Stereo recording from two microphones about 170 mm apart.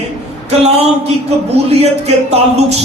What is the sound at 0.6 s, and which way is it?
Speech, 35° right (ahead or behind).